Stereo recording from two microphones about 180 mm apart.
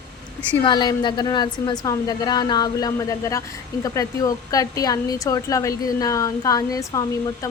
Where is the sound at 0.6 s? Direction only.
25° left (ahead or behind).